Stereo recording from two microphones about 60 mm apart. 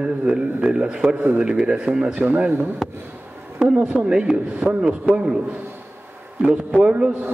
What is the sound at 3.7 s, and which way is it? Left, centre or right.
A man's voice, centre.